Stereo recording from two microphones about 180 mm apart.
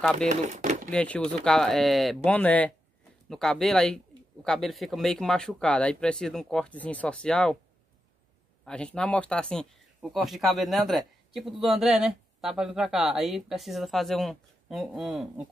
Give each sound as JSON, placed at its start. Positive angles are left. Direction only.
{"t": 0.3, "sound": "speech", "side_deg": -45}
{"t": 0.9, "sound": "speech", "side_deg": 5}
{"t": 8.6, "sound": "speech", "side_deg": 5}